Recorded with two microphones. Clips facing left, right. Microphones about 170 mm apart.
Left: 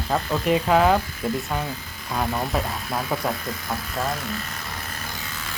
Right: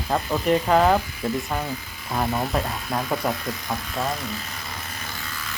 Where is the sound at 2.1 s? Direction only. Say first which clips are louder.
Right 1 dB; centre (ahead or behind).